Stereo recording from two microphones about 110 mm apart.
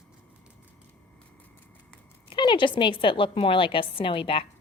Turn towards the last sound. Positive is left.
turn(degrees=55)  # may be behind; listen again after turning